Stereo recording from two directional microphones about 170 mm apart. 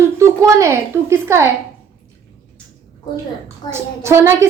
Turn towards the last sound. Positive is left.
turn(degrees=-15)  # may be behind; listen again after turning